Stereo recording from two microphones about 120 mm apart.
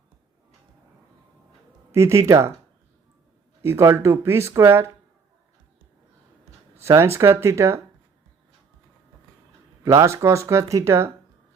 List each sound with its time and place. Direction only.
1.9 s speech: 25° right (ahead or behind)
3.6 s speech: 20° right (ahead or behind)
6.7 s speech: 20° right (ahead or behind)
9.8 s speech: 25° right (ahead or behind)